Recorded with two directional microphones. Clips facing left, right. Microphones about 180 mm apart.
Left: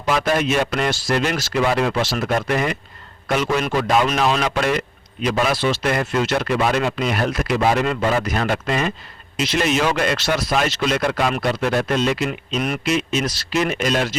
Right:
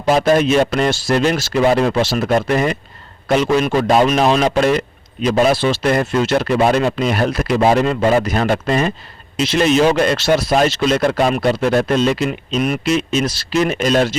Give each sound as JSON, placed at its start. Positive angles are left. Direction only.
{"t": 0.1, "sound": "speech", "side_deg": -35}